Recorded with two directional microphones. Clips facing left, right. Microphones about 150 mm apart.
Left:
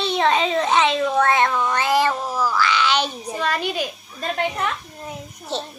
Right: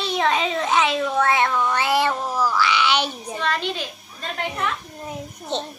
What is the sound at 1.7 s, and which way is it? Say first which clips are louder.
Cat: left 1 dB; 10° right (ahead or behind).